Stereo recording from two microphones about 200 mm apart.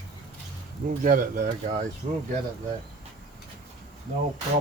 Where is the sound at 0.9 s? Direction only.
40° right (ahead or behind).